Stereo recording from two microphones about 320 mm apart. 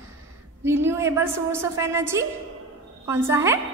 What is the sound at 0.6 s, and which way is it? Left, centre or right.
A woman's voice, centre.